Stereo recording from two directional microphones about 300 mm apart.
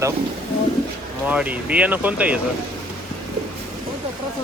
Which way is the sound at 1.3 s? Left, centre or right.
Centre.